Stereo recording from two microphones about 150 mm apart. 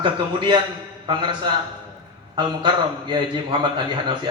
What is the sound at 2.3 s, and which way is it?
A man's voice, 30° right (ahead or behind).